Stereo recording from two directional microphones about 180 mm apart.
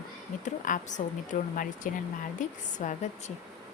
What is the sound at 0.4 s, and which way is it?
A woman's voice, 45° left (ahead or behind).